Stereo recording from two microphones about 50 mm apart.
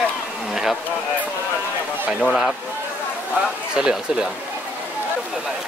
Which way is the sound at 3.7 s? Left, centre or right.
Centre.